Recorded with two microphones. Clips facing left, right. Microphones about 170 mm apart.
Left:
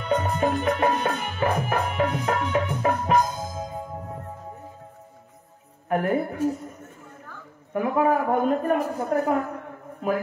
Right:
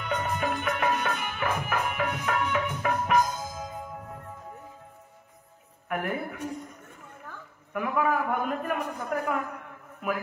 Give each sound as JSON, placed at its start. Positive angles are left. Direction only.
{"t": 0.0, "sound": "music", "side_deg": 35}
{"t": 2.3, "sound": "a man's voice", "side_deg": 35}
{"t": 3.1, "sound": "music", "side_deg": 35}
{"t": 5.9, "sound": "a man's voice", "side_deg": 35}
{"t": 7.7, "sound": "a man's voice", "side_deg": 35}